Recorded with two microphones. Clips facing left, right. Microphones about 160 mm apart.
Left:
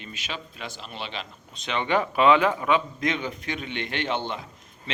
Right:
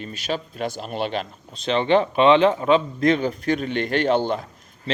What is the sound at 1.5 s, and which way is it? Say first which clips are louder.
A man's voice: right 7 dB; 30° right (ahead or behind).